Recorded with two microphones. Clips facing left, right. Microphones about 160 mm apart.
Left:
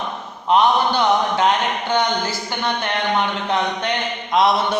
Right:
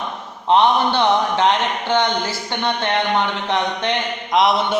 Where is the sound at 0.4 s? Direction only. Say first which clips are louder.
Right 1 dB; 25° right (ahead or behind).